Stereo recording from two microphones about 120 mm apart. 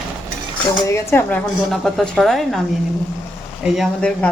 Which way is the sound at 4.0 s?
10° left (ahead or behind).